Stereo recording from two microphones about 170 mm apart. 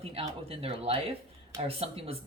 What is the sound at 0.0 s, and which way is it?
Speech, 35° right (ahead or behind).